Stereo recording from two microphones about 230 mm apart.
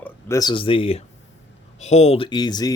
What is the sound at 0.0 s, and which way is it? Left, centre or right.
Speech, centre.